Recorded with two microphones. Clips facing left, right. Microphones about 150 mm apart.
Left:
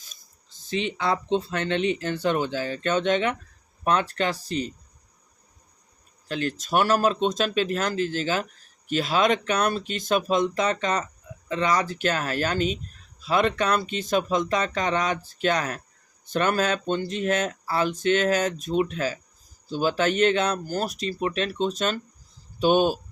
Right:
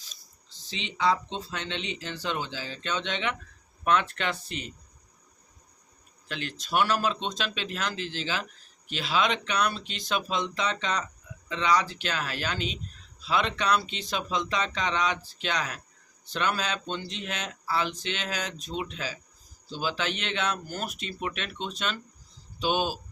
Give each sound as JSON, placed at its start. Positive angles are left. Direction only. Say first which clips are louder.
{"t": 0.0, "sound": "speech", "louder": "even", "side_deg": 50}
{"t": 6.2, "sound": "speech", "louder": "left 8 dB", "side_deg": 40}